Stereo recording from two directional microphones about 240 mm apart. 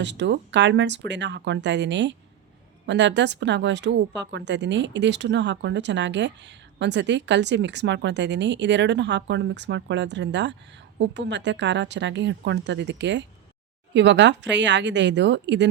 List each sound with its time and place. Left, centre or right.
0.0 s a woman's voice: right